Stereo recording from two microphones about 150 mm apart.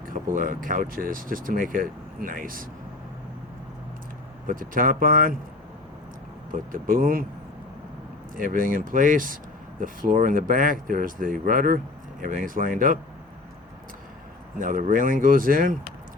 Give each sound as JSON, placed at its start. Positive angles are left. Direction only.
{"t": 0.3, "sound": "speech", "side_deg": -65}
{"t": 4.4, "sound": "speech", "side_deg": -65}
{"t": 6.5, "sound": "speech", "side_deg": -70}
{"t": 8.4, "sound": "speech", "side_deg": -70}
{"t": 14.6, "sound": "speech", "side_deg": -65}